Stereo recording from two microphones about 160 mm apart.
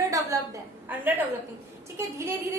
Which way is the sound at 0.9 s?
10° right (ahead or behind).